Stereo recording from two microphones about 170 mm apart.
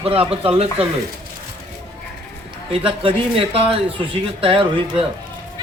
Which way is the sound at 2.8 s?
30° right (ahead or behind).